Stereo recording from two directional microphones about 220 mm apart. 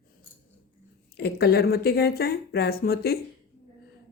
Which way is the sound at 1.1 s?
45° left (ahead or behind).